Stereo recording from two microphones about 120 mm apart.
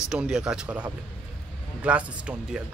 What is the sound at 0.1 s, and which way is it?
Speech, 5° right (ahead or behind).